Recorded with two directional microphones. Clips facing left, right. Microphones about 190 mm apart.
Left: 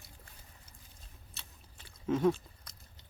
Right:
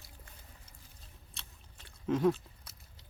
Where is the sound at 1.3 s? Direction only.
Centre (ahead or behind).